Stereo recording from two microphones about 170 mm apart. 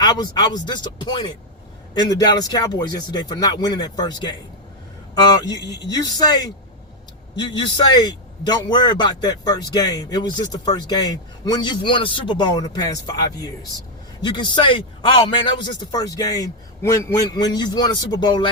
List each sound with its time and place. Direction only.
0.0 s a man's voice: 25° left (ahead or behind)
7.5 s a man's voice: 25° left (ahead or behind)